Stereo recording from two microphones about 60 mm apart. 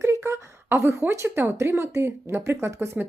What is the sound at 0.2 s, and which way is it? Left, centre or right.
A woman's voice, right.